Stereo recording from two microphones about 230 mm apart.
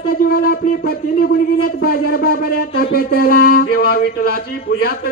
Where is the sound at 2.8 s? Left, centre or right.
Left.